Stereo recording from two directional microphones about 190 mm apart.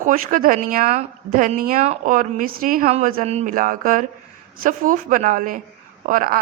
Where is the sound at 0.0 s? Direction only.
45° right (ahead or behind).